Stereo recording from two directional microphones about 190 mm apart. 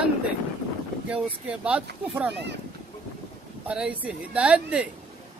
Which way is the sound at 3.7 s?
5° right (ahead or behind).